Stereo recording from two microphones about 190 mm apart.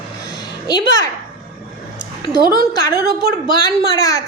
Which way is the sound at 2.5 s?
55° right (ahead or behind).